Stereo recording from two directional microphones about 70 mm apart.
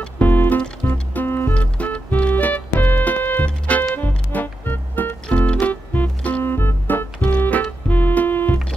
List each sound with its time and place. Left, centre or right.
0.2 s music: left
1.5 s music: centre
6.4 s music: left
7.2 s music: centre